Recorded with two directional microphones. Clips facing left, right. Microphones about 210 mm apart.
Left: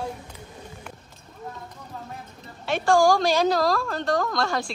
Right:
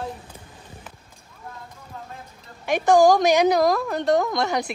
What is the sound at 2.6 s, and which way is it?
A woman's voice, 15° right (ahead or behind).